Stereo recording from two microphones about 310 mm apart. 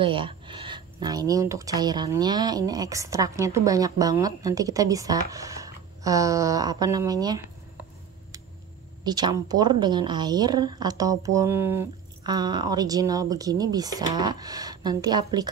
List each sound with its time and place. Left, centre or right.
0.0 s speech: centre
9.0 s speech: centre